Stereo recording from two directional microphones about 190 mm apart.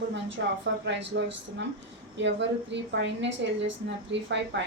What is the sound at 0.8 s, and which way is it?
A woman's voice, 65° right (ahead or behind).